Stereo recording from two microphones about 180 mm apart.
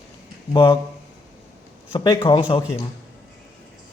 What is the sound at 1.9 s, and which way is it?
Speech, 20° left (ahead or behind).